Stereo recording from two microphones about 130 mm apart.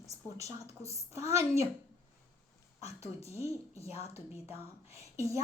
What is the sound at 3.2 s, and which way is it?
Speech, 50° left (ahead or behind).